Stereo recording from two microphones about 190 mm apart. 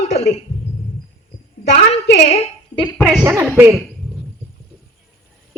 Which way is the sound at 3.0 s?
Centre (ahead or behind).